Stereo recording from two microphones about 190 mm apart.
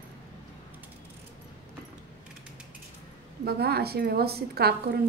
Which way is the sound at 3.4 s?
55° right (ahead or behind).